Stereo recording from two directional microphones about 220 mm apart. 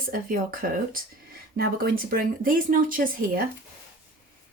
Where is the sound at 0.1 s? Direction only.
40° right (ahead or behind).